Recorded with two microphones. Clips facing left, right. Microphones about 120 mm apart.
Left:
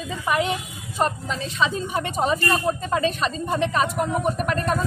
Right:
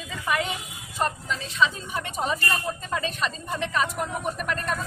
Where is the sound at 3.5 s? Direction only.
25° left (ahead or behind).